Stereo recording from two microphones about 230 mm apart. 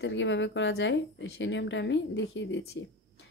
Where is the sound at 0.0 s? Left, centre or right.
Left.